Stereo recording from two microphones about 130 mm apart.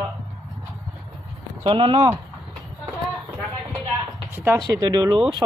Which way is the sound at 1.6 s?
40° right (ahead or behind).